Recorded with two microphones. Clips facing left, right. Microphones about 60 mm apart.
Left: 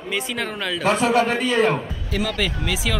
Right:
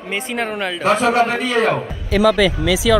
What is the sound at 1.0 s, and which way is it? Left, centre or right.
A man's voice, right.